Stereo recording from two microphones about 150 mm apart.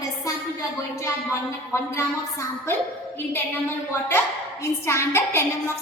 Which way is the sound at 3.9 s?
15° left (ahead or behind).